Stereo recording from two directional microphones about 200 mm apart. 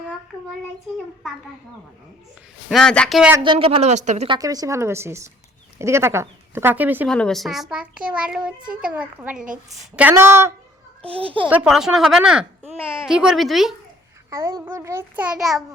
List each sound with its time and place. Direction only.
2.6 s a child's voice: centre (ahead or behind)
3.4 s speech: 25° right (ahead or behind)
4.3 s a child's voice: 20° right (ahead or behind)
7.1 s a child's voice: 5° left (ahead or behind); by 10.5 s 10° right (ahead or behind)
11.0 s a child's voice: 30° right (ahead or behind)
11.4 s a child's voice: 5° right (ahead or behind)
14.3 s a child's voice: 15° right (ahead or behind)